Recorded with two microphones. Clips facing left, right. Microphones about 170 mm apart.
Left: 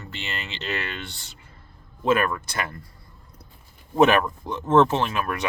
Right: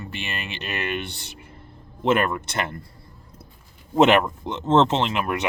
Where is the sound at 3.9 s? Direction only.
20° right (ahead or behind).